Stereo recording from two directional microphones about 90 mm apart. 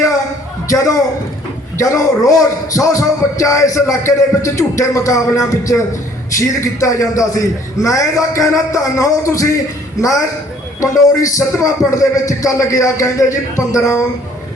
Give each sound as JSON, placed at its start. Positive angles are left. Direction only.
{"t": 1.8, "sound": "speech", "side_deg": 40}